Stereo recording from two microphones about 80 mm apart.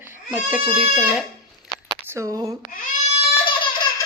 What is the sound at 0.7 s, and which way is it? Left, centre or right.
Speech, centre.